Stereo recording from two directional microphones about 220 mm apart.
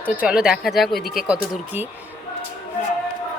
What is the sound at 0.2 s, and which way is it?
A woman's voice, 5° right (ahead or behind).